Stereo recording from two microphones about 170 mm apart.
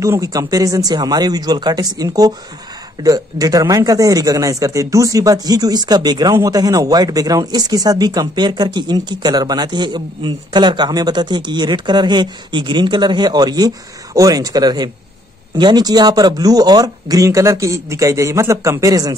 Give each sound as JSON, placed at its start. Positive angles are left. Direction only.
{"t": 0.0, "sound": "a man's voice", "side_deg": -20}